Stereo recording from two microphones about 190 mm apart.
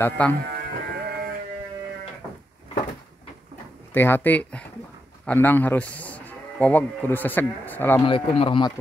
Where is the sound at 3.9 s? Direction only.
10° left (ahead or behind).